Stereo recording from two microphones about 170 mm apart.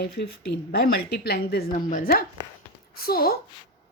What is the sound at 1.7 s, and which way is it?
A woman's voice, 50° left (ahead or behind).